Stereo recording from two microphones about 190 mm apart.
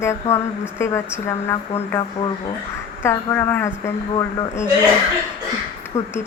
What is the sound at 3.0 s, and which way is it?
Speech, 15° left (ahead or behind).